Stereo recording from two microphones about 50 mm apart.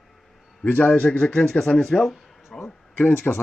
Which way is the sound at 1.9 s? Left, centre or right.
Centre.